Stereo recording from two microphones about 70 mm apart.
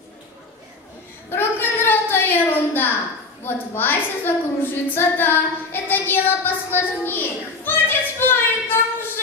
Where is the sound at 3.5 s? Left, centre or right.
Left.